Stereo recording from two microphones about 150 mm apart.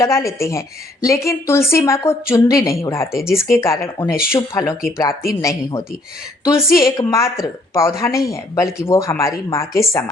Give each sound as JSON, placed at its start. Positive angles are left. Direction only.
{"t": 0.0, "sound": "speech", "side_deg": 20}
{"t": 6.6, "sound": "a woman's voice", "side_deg": 75}
{"t": 6.8, "sound": "speech", "side_deg": 25}